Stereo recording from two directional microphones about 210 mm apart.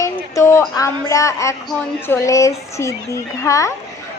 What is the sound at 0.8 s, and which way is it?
A woman's voice, 15° left (ahead or behind).